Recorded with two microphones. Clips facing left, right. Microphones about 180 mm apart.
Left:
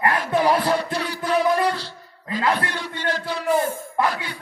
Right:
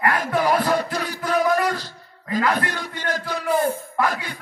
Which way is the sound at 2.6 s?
45° right (ahead or behind).